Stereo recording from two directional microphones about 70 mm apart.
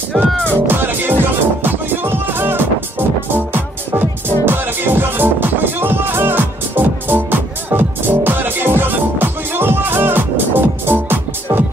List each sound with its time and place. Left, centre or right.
0.1 s music: centre
0.5 s music: right